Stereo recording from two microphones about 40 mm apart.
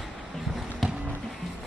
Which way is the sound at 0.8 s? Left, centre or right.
Centre.